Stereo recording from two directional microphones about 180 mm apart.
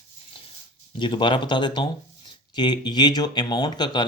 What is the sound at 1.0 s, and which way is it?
Speech, 25° left (ahead or behind).